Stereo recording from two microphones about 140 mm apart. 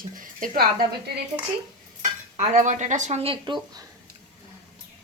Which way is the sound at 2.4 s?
60° right (ahead or behind).